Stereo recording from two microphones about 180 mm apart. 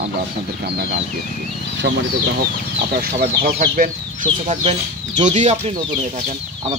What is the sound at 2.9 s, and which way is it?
Speech, 55° right (ahead or behind).